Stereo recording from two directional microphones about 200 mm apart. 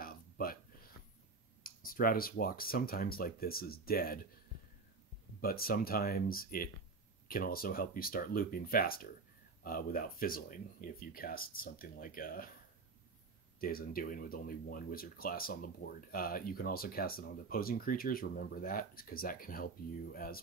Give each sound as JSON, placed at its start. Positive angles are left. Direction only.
{"t": 0.0, "sound": "a sound", "side_deg": 45}
{"t": 1.6, "sound": "speech", "side_deg": 45}
{"t": 5.4, "sound": "speech", "side_deg": 50}
{"t": 13.6, "sound": "speech", "side_deg": 45}